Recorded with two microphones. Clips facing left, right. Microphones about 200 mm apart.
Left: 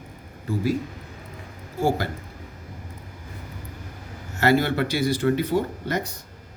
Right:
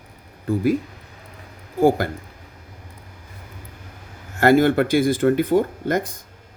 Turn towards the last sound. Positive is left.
turn(degrees=-50)  # may be behind; listen again after turning